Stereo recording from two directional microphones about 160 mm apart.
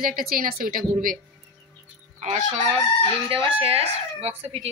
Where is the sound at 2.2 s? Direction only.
45° right (ahead or behind).